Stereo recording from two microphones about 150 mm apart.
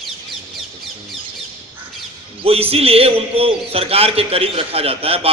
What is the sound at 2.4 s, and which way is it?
A man's voice, 40° right (ahead or behind).